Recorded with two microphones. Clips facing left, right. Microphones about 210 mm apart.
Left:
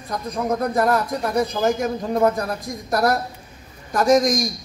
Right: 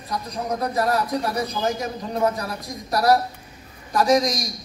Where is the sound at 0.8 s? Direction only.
50° left (ahead or behind).